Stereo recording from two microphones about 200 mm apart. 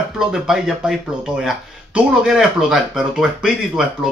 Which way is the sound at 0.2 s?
5° right (ahead or behind).